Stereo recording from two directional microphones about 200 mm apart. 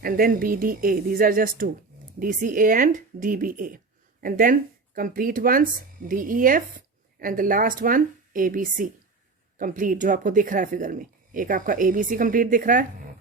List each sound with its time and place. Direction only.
0.0 s speech: 45° right (ahead or behind)